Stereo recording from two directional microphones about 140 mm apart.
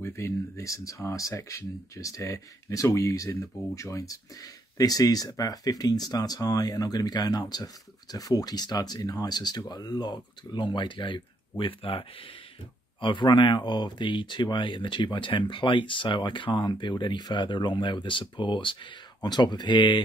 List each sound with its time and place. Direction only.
0.0 s speech: 20° left (ahead or behind); by 20.0 s 35° left (ahead or behind)